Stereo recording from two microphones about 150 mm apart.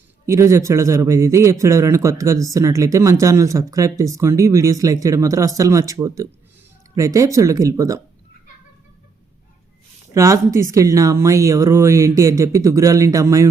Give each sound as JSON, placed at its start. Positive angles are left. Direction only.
{"t": 0.3, "sound": "speech", "side_deg": -20}
{"t": 10.2, "sound": "speech", "side_deg": -20}